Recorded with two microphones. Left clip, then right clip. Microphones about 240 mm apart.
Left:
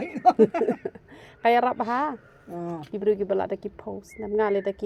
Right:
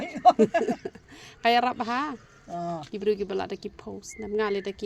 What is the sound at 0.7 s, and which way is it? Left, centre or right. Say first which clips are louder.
Speech: left 3 dB; centre.